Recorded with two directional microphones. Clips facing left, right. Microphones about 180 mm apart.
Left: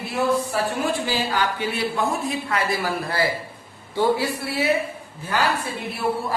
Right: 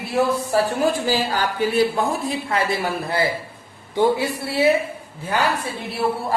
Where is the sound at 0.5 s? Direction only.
40° right (ahead or behind).